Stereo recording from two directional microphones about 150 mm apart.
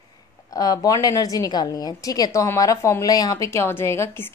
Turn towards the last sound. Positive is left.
turn(degrees=15)  # may be behind; listen again after turning